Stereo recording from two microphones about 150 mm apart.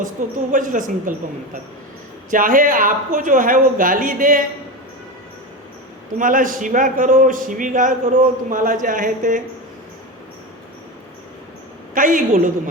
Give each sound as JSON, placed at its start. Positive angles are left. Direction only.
{"t": 0.0, "sound": "speech", "side_deg": -60}
{"t": 2.3, "sound": "speech", "side_deg": -65}
{"t": 6.1, "sound": "speech", "side_deg": -65}
{"t": 11.9, "sound": "speech", "side_deg": -65}